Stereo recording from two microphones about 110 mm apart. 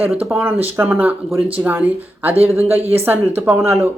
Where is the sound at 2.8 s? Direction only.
65° right (ahead or behind).